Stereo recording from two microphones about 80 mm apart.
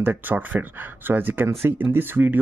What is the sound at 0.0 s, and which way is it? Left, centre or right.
Speech, right.